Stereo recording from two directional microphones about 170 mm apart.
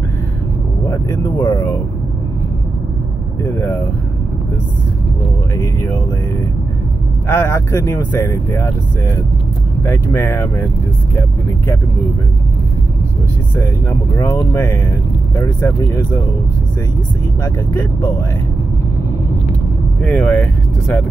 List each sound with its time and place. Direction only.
0.8 s vehicle: 20° left (ahead or behind)
1.4 s a sound: 20° left (ahead or behind)
3.4 s speech: 15° left (ahead or behind)
5.6 s speech: 15° left (ahead or behind)
7.2 s speech: 15° left (ahead or behind)
14.1 s speech: 20° left (ahead or behind)
20.0 s speech: 10° left (ahead or behind)